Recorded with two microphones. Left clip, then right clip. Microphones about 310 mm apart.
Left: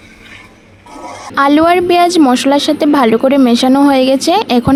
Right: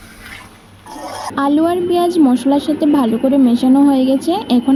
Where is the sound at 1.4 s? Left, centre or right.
Left.